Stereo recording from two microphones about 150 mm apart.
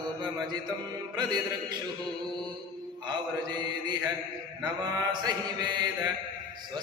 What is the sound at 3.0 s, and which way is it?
Mantra, 30° right (ahead or behind).